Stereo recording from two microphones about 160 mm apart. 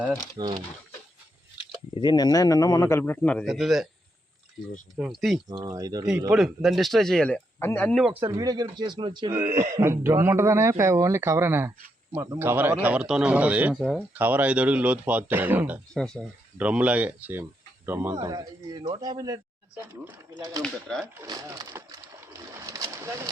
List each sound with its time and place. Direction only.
0.4 s speech: 30° right (ahead or behind)
2.0 s a man's voice: 25° left (ahead or behind); by 3.4 s 10° left (ahead or behind)
3.4 s speech: centre (ahead or behind)
5.7 s speech: 20° right (ahead or behind)
6.3 s speech: centre (ahead or behind)
8.1 s speech: 15° right (ahead or behind)
9.3 s speech: 20° right (ahead or behind); by 14.0 s centre (ahead or behind)
14.1 s speech: 10° right (ahead or behind)
18.3 s speech: 25° right (ahead or behind)
20.6 s speech: centre (ahead or behind)
21.2 s a sound: 20° right (ahead or behind)